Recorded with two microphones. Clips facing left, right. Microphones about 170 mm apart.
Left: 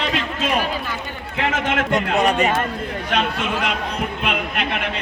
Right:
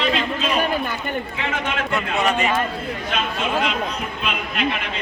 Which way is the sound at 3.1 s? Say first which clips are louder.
Left 1 dB; 70° left (ahead or behind).